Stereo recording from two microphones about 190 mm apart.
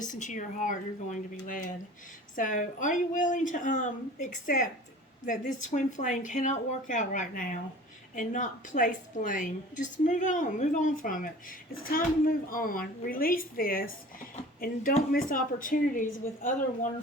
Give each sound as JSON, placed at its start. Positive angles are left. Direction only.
{"t": 0.0, "sound": "a woman's voice", "side_deg": 40}